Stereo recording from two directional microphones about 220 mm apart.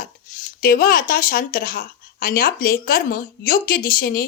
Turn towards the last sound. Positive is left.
turn(degrees=40)  # may be behind; listen again after turning